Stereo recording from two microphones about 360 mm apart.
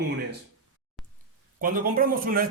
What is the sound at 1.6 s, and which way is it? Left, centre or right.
Speech, right.